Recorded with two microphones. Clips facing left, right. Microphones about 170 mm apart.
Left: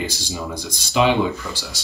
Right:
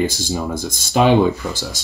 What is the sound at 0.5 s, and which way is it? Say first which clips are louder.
Speech: right 1 dB; 50° right (ahead or behind).